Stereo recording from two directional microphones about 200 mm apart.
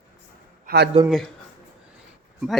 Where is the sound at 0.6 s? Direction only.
55° right (ahead or behind).